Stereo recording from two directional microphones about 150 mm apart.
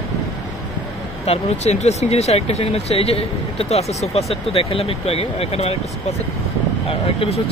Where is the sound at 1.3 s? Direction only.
50° left (ahead or behind).